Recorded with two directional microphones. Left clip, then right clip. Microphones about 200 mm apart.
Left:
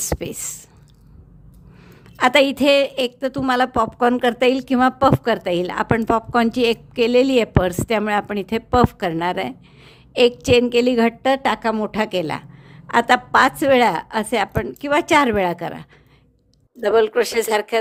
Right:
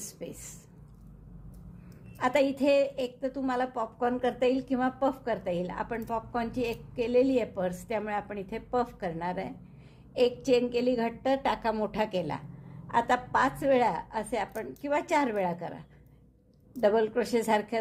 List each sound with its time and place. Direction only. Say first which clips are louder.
0.0 s speech: left 16 dB; 45° left (ahead or behind)
2.1 s a woman's voice: left 11 dB; 40° left (ahead or behind)